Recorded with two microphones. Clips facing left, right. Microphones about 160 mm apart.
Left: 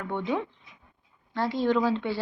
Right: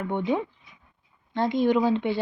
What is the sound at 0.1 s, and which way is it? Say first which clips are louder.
A woman's voice: right 2 dB; 20° right (ahead or behind).